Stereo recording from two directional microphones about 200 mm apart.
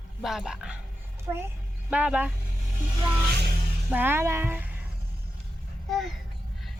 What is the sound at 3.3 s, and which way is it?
Music, 55° right (ahead or behind).